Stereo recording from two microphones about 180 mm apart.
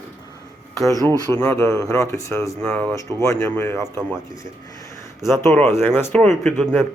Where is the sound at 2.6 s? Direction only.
5° left (ahead or behind).